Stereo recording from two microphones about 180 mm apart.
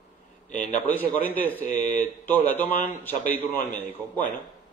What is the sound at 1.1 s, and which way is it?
Speech, 10° left (ahead or behind).